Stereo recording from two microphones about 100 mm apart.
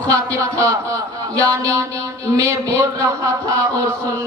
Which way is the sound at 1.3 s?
35° right (ahead or behind).